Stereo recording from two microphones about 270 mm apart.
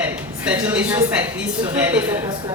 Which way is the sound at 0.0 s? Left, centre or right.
Centre.